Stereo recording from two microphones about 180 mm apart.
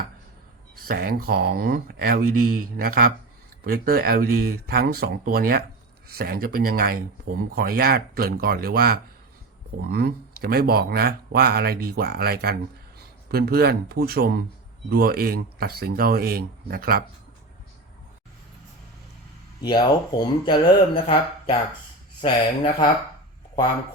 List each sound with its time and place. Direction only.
0.9 s speech: 55° right (ahead or behind)
19.6 s speech: 25° left (ahead or behind)